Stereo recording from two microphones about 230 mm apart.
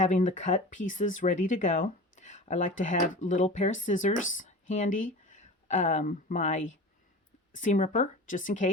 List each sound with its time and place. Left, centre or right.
0.0 s speech: left